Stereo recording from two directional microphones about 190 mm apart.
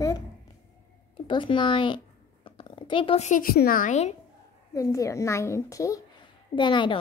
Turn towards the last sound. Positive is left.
turn(degrees=25)  # may be behind; listen again after turning